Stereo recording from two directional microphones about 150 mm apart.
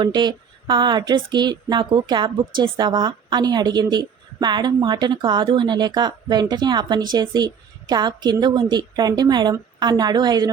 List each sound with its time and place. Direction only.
0.0 s speech: 30° right (ahead or behind)